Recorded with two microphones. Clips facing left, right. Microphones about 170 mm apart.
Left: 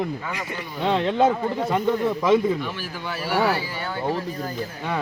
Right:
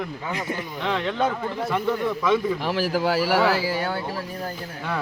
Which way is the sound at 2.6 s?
90° right.